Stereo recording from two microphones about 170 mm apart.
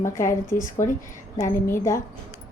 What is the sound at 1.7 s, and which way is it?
Speech, 15° left (ahead or behind).